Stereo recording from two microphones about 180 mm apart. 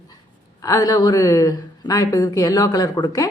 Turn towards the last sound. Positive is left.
turn(degrees=20)  # may be behind; listen again after turning